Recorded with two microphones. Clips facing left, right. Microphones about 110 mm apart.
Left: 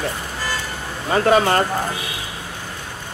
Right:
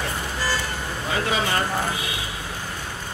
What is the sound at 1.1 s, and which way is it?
Speech, 50° left (ahead or behind).